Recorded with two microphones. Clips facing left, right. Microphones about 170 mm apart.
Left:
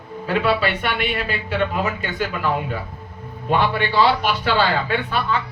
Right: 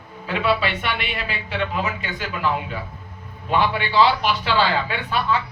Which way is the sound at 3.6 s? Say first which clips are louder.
Even; 45° left (ahead or behind).